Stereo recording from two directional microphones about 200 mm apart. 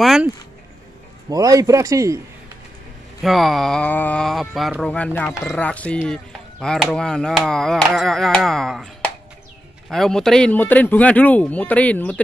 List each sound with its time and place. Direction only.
0.0 s speech: centre (ahead or behind)
1.3 s speech: 15° right (ahead or behind)
3.2 s speech: centre (ahead or behind)